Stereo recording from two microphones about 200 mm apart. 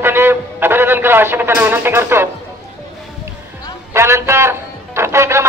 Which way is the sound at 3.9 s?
15° right (ahead or behind).